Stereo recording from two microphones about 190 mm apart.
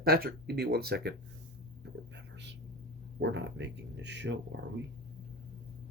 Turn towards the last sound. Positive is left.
turn(degrees=-65)  # may be behind; listen again after turning